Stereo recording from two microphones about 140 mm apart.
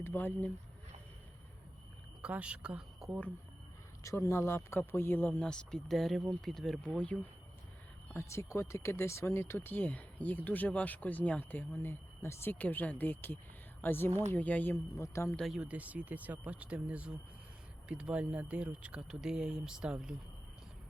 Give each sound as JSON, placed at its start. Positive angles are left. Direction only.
{"t": 0.0, "sound": "speech", "side_deg": 15}
{"t": 2.2, "sound": "speech", "side_deg": -10}
{"t": 4.0, "sound": "speech", "side_deg": 20}
{"t": 8.1, "sound": "a man's voice", "side_deg": 20}
{"t": 15.4, "sound": "speech", "side_deg": 0}